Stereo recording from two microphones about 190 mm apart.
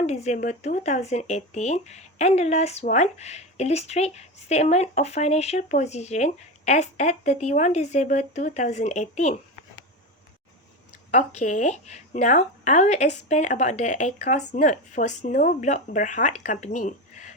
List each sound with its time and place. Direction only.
0.0 s speech: 35° left (ahead or behind)
11.1 s speech: 40° left (ahead or behind)